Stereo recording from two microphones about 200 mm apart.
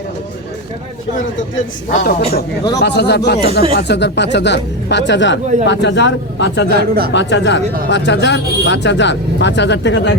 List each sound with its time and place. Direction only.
1.9 s a man's voice: 50° left (ahead or behind)
6.7 s speech: 50° right (ahead or behind)
7.1 s speech: 60° left (ahead or behind)